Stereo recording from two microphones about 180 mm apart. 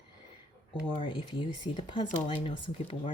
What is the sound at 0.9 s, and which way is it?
Speech, 25° left (ahead or behind).